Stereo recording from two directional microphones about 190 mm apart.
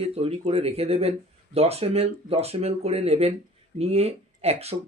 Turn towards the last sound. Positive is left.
turn(degrees=-35)  # may be behind; listen again after turning